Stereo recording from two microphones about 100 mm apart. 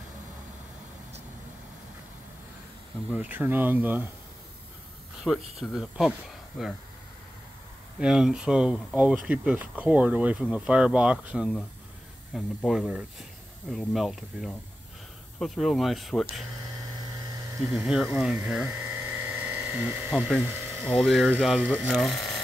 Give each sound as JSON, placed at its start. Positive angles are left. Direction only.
{"t": 3.1, "sound": "speech", "side_deg": -15}
{"t": 5.2, "sound": "speech", "side_deg": 0}
{"t": 8.0, "sound": "speech", "side_deg": -5}
{"t": 17.6, "sound": "speech", "side_deg": -5}
{"t": 18.7, "sound": "electric toothbrush", "side_deg": -25}
{"t": 20.2, "sound": "speech", "side_deg": 5}
{"t": 21.6, "sound": "speech", "side_deg": -15}
{"t": 21.9, "sound": "speech", "side_deg": 0}